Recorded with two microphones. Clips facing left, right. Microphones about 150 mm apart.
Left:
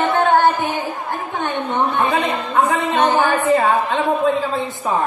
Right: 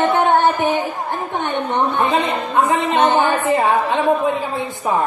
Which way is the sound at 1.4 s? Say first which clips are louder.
Even; 20° right (ahead or behind).